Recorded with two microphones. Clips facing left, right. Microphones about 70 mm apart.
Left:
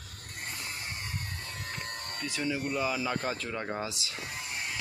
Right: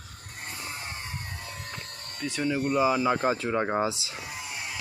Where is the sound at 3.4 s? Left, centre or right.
Right.